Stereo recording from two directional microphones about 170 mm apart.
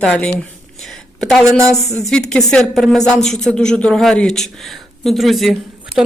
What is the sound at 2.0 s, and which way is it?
A woman's voice, 5° left (ahead or behind).